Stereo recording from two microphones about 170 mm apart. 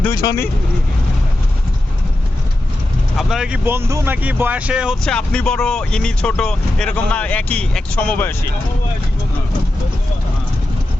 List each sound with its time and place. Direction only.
0.2 s speech: 25° left (ahead or behind)
3.2 s speech: centre (ahead or behind)